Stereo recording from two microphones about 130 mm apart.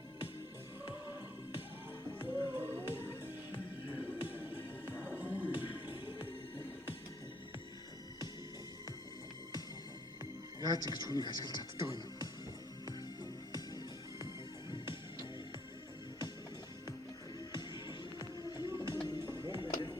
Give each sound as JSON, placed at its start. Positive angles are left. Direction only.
{"t": 2.1, "sound": "music", "side_deg": -15}
{"t": 4.2, "sound": "music", "side_deg": -15}
{"t": 10.6, "sound": "speech", "side_deg": -30}
{"t": 11.2, "sound": "speech", "side_deg": 35}
{"t": 14.7, "sound": "music", "side_deg": 35}
{"t": 17.5, "sound": "music", "side_deg": 35}